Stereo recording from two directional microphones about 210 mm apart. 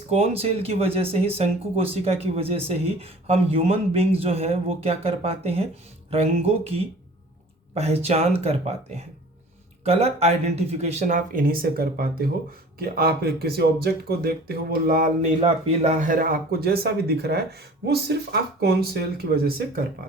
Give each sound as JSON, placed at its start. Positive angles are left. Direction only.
{"t": 0.1, "sound": "speech", "side_deg": -30}
{"t": 15.4, "sound": "speech", "side_deg": -30}